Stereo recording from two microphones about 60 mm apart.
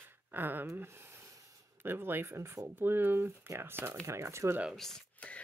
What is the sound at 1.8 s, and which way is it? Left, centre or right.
Speech, right.